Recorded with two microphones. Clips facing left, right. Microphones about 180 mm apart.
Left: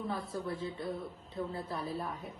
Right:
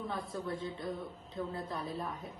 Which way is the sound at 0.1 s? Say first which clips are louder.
Left 1 dB; 5° left (ahead or behind).